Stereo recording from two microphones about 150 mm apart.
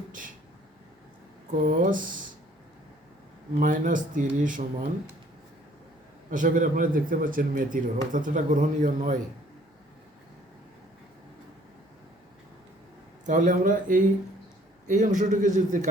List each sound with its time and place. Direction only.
1.5 s speech: 60° right (ahead or behind)
3.6 s speech: 65° right (ahead or behind)
6.3 s speech: 60° right (ahead or behind)
13.2 s speech: 60° right (ahead or behind)